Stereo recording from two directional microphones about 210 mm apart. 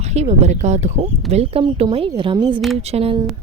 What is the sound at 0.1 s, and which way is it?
Speech, 30° right (ahead or behind).